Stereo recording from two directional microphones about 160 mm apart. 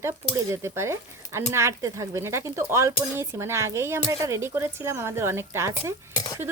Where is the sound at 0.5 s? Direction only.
15° right (ahead or behind).